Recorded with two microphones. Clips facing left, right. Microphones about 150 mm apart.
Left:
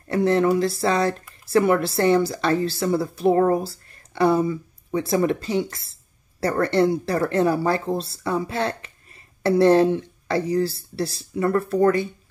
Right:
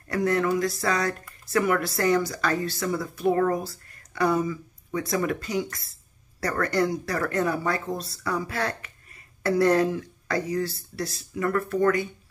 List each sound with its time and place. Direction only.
0.1 s speech: 25° left (ahead or behind)